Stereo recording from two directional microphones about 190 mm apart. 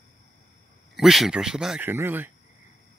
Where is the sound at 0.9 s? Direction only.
Centre (ahead or behind).